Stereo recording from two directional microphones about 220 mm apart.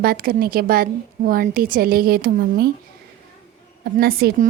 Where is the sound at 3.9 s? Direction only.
45° right (ahead or behind).